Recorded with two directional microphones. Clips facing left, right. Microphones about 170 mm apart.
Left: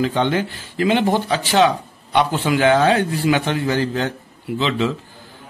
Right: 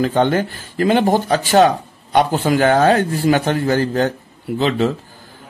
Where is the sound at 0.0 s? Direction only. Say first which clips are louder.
Right 3 dB; 45° right (ahead or behind).